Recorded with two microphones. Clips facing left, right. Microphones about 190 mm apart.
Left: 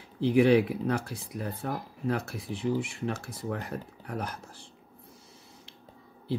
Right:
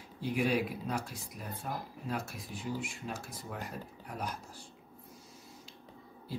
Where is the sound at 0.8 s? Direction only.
65° left (ahead or behind).